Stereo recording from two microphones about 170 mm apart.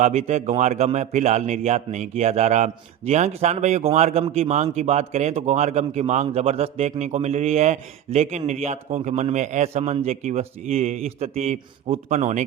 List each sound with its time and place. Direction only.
0.0 s speech: 40° right (ahead or behind)